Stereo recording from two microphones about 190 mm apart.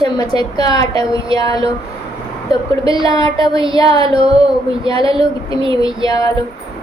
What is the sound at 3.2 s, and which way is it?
Speech, 25° right (ahead or behind).